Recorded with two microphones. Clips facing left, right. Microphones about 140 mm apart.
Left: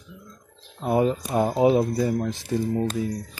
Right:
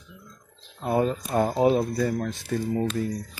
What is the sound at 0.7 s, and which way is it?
Speech, 10° left (ahead or behind).